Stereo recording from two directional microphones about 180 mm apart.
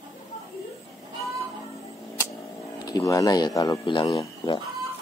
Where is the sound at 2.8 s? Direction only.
20° left (ahead or behind).